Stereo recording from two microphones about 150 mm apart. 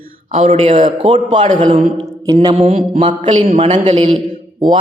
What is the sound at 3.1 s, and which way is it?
Speech, 60° right (ahead or behind).